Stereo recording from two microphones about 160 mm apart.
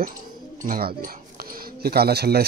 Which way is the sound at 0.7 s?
65° right (ahead or behind).